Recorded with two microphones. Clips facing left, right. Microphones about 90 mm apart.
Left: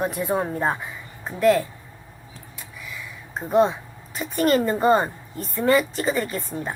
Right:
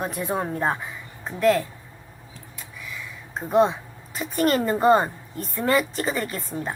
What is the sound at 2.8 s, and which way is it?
A woman's voice, 5° left (ahead or behind).